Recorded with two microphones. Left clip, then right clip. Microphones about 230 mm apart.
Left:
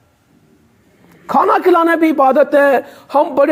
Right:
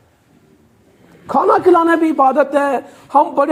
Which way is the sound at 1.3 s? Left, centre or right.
Left.